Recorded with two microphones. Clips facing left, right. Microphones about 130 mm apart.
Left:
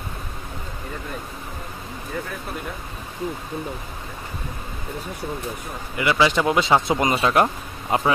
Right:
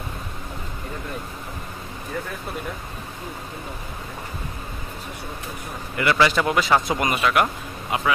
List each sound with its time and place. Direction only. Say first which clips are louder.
5.9 s speech: even; 15° left (ahead or behind); by 8.1 s 35° left (ahead or behind)